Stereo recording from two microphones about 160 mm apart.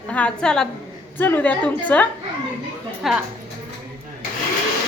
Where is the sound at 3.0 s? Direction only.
Centre (ahead or behind).